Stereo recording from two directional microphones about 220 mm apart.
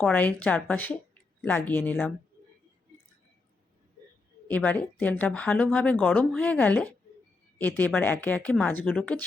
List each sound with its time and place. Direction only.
0.0 s speech: 5° left (ahead or behind)
4.4 s speech: 5° left (ahead or behind)